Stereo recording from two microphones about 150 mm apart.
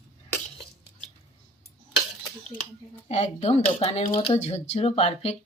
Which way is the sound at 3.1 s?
45° left (ahead or behind).